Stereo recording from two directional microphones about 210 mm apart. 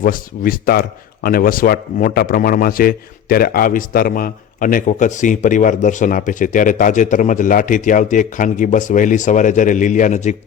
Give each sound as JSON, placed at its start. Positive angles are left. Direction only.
{"t": 0.0, "sound": "speech", "side_deg": 45}